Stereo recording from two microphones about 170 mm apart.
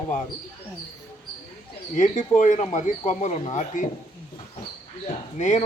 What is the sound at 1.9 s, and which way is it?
Speech, 50° left (ahead or behind).